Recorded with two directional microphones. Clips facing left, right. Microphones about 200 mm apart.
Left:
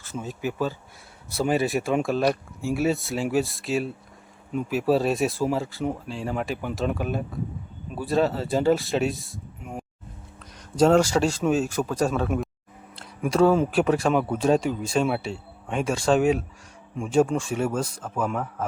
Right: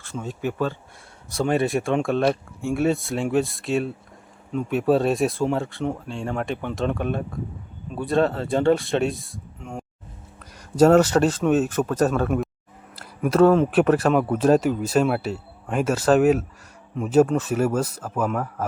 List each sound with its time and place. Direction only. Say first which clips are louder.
0.0 s speech: right 2 dB; centre (ahead or behind)
10.4 s speech: right 4 dB; 10° right (ahead or behind)